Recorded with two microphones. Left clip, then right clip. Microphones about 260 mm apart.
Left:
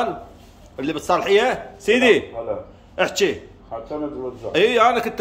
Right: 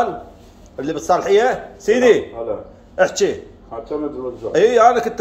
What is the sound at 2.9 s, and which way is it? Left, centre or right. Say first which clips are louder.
Speech: right 3 dB; centre.